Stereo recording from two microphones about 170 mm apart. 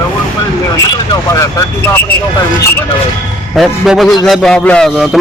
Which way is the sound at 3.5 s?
Centre (ahead or behind).